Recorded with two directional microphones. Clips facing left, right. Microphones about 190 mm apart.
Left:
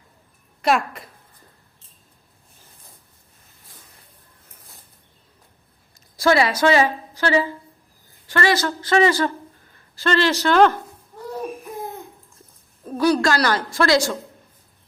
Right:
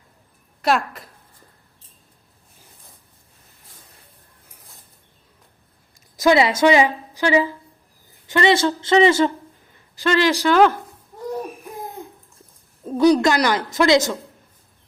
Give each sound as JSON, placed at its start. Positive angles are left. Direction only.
{"t": 0.6, "sound": "speech", "side_deg": 0}
{"t": 6.1, "sound": "a woman's voice", "side_deg": -20}
{"t": 12.8, "sound": "a woman's voice", "side_deg": -20}